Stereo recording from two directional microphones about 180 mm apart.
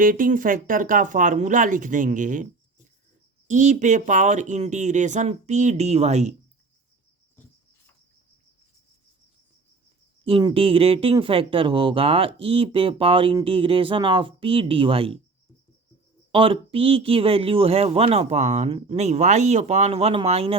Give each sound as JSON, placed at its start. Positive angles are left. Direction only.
{"t": 0.0, "sound": "speech", "side_deg": -50}
{"t": 10.2, "sound": "speech", "side_deg": -30}
{"t": 16.3, "sound": "speech", "side_deg": -30}